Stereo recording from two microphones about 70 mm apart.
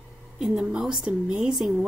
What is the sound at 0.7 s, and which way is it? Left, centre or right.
Speech, centre.